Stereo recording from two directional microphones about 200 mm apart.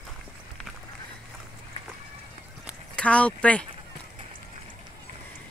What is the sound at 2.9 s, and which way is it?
Speech, 5° left (ahead or behind).